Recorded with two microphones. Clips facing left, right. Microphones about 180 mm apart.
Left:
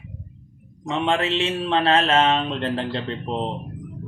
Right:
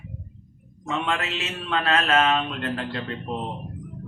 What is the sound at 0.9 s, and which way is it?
Speech, 30° left (ahead or behind).